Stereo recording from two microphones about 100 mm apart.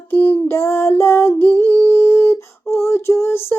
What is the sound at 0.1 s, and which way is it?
Female singing, 20° left (ahead or behind).